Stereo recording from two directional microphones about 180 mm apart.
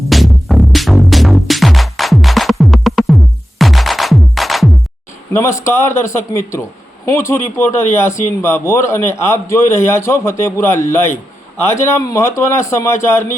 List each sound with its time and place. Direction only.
0.1 s music: centre (ahead or behind)
5.3 s a man's voice: 15° left (ahead or behind)